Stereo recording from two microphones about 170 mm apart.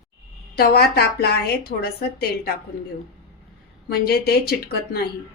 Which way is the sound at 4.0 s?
65° left (ahead or behind).